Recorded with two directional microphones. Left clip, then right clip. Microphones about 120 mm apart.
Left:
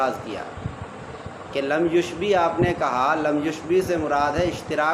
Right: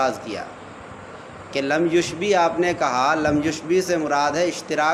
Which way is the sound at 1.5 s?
60° right (ahead or behind).